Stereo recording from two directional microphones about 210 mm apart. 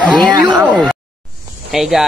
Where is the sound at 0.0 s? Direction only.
5° left (ahead or behind).